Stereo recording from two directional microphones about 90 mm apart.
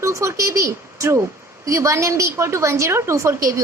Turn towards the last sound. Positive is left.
turn(degrees=-35)  # may be behind; listen again after turning